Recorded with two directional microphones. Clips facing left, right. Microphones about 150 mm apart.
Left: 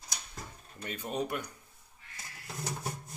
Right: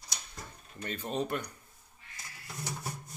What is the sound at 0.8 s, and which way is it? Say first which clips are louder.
Speech: right 1 dB; 10° left (ahead or behind).